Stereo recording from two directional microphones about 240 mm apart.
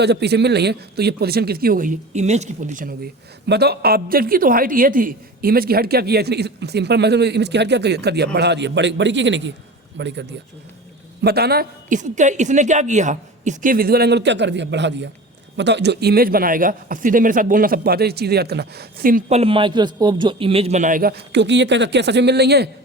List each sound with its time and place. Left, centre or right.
0.0 s a man's voice: right